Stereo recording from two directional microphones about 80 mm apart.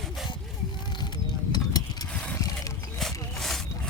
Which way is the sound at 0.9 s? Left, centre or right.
Left.